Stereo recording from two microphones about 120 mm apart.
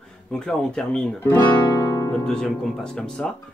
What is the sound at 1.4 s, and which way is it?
Guitar, 35° left (ahead or behind).